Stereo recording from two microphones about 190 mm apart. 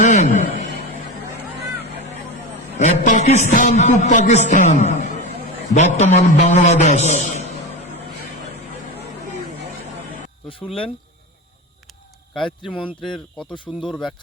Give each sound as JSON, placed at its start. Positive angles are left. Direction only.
{"t": 0.0, "sound": "a sound", "side_deg": 40}
{"t": 2.7, "sound": "a man's voice", "side_deg": 40}
{"t": 10.2, "sound": "a sound", "side_deg": 30}
{"t": 12.4, "sound": "speech", "side_deg": 0}
{"t": 12.7, "sound": "speech", "side_deg": 25}
{"t": 13.7, "sound": "speech", "side_deg": 5}